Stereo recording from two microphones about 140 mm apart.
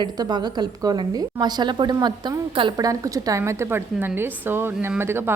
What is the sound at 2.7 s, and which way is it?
A woman's voice, 25° right (ahead or behind).